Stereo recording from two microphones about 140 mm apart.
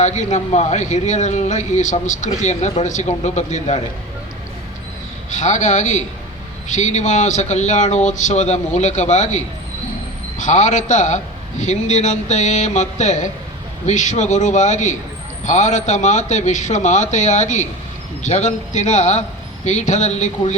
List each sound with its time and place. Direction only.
0.0 s speech: 55° left (ahead or behind)
5.3 s speech: 55° left (ahead or behind)